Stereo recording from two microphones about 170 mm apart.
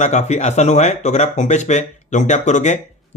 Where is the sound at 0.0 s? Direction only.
40° left (ahead or behind).